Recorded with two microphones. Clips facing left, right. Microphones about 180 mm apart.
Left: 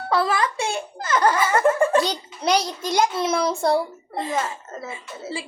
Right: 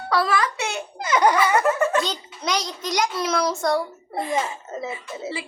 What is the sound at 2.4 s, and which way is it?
A woman's voice, 30° left (ahead or behind).